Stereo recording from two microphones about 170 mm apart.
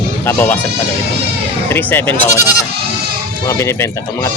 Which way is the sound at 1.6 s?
10° left (ahead or behind).